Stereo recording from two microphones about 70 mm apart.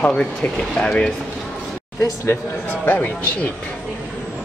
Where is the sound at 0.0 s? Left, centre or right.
Centre.